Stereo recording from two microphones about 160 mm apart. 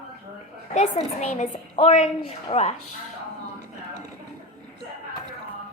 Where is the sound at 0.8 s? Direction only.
45° left (ahead or behind).